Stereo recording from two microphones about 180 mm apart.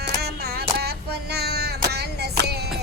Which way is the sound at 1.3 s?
65° right (ahead or behind).